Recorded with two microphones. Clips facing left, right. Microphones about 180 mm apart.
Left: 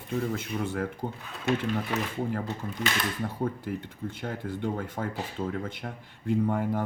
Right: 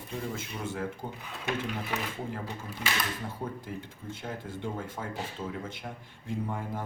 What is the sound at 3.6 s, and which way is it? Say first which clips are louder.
Speech: left 6 dB; 60° left (ahead or behind).